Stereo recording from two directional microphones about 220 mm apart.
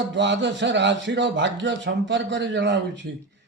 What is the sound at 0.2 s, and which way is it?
A man's voice, 55° right (ahead or behind).